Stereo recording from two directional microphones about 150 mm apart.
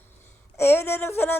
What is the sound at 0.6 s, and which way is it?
Speech, 15° left (ahead or behind).